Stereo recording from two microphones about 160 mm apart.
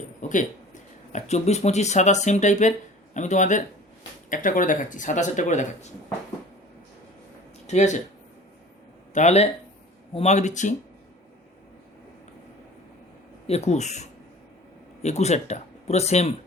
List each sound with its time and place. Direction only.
0.2 s speech: 50° left (ahead or behind)
7.7 s speech: 50° left (ahead or behind)
9.1 s speech: 45° left (ahead or behind)
13.5 s speech: 45° left (ahead or behind)